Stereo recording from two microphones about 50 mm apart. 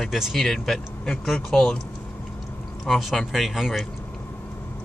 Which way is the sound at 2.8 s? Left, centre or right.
Centre.